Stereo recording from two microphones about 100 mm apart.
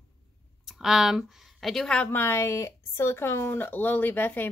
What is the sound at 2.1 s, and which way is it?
Speech, 25° left (ahead or behind).